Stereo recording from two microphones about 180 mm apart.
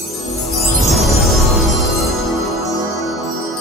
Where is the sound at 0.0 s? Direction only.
Centre (ahead or behind).